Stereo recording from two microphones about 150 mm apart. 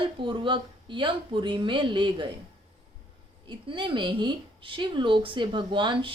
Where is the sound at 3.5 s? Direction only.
35° right (ahead or behind).